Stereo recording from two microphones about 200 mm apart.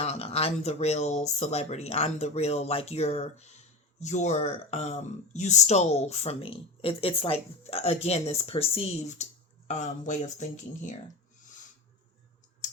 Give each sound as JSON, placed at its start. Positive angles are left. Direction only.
{"t": 0.0, "sound": "speech", "side_deg": 30}